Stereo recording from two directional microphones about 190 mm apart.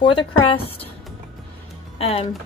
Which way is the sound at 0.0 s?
25° left (ahead or behind).